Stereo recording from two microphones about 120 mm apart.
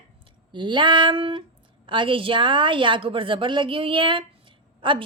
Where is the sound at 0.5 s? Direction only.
40° right (ahead or behind).